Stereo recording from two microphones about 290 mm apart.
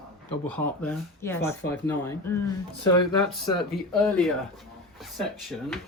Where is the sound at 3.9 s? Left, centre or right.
Centre.